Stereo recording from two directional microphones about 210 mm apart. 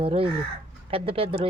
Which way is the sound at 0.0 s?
25° right (ahead or behind).